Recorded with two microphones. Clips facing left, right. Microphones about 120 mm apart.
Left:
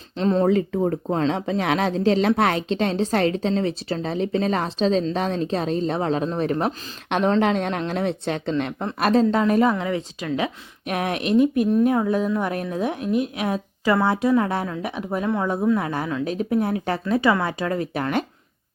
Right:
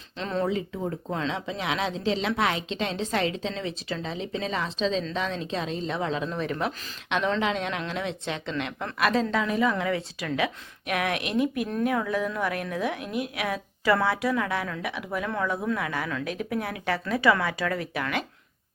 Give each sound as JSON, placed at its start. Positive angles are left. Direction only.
{"t": 0.2, "sound": "speech", "side_deg": 35}
{"t": 0.4, "sound": "speech", "side_deg": 55}
{"t": 1.1, "sound": "speech", "side_deg": 45}
{"t": 9.7, "sound": "a woman's voice", "side_deg": 25}
{"t": 10.3, "sound": "a woman's voice", "side_deg": 30}